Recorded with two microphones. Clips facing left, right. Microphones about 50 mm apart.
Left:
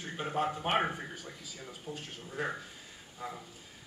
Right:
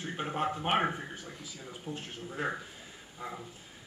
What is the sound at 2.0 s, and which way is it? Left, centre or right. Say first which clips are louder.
Speech: even; centre.